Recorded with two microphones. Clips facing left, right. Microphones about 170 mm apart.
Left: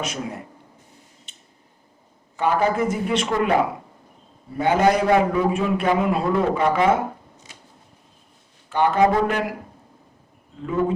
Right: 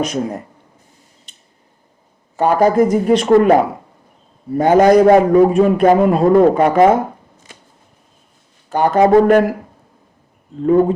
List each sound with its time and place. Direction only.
0.0 s speech: 40° right (ahead or behind)
1.3 s scissors: 35° right (ahead or behind)
2.3 s a man's voice: 40° right (ahead or behind)
8.7 s a man's voice: 40° right (ahead or behind)
10.7 s speech: 40° right (ahead or behind)